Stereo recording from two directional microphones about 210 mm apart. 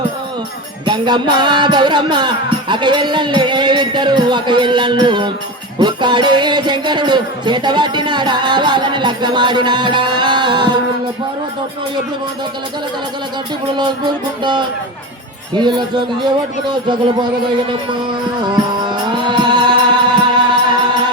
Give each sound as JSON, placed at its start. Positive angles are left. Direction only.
{"t": 0.9, "sound": "music", "side_deg": -20}
{"t": 13.7, "sound": "music", "side_deg": -20}
{"t": 18.9, "sound": "music", "side_deg": -20}